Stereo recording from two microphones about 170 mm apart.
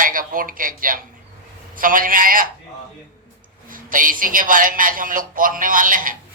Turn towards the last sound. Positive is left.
turn(degrees=-55)  # may be behind; listen again after turning